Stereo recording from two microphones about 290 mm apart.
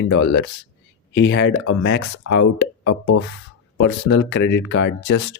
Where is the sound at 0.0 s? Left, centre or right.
Left.